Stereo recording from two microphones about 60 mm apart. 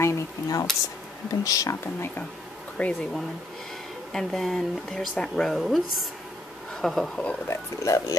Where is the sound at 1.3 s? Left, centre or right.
Left.